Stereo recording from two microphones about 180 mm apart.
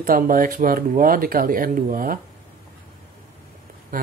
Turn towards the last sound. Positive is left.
turn(degrees=-50)  # may be behind; listen again after turning